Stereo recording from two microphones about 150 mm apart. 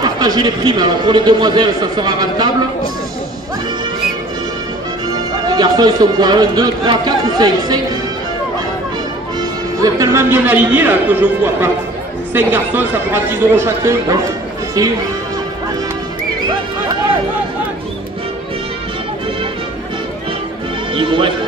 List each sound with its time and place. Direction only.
0.0 s a man's voice: 30° right (ahead or behind)
5.5 s a man's voice: 25° right (ahead or behind)
9.4 s a man's voice: 20° right (ahead or behind)
20.9 s speech: 35° right (ahead or behind)